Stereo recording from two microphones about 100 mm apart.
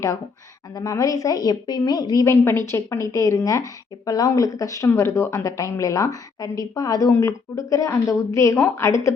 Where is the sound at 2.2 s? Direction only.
25° left (ahead or behind).